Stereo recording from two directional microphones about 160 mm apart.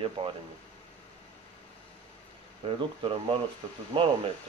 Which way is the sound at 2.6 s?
35° right (ahead or behind).